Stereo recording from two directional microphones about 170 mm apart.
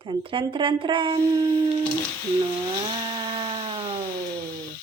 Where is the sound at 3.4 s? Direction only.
30° right (ahead or behind).